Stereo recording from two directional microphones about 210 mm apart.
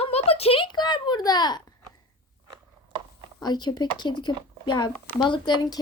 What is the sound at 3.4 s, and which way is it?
Speech, 20° left (ahead or behind).